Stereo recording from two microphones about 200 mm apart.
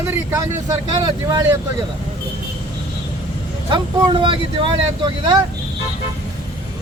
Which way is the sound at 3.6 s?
25° right (ahead or behind).